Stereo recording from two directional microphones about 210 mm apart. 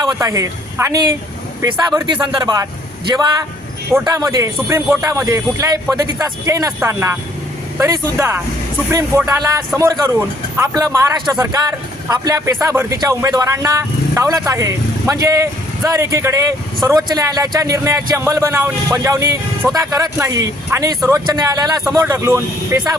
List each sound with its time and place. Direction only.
0.0 s speech: 15° right (ahead or behind)
3.9 s speech: 15° right (ahead or behind)